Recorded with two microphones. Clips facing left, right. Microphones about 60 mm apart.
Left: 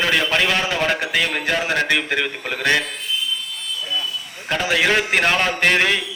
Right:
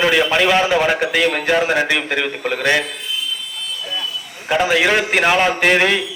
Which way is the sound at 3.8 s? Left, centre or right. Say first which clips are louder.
Left 1 dB; centre.